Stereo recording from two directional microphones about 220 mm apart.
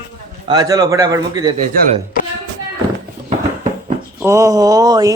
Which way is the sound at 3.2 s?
30° right (ahead or behind).